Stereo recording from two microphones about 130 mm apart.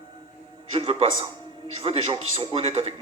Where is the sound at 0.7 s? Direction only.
50° right (ahead or behind).